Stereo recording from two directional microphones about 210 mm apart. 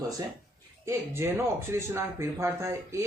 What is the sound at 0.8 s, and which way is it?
Speech, 10° right (ahead or behind).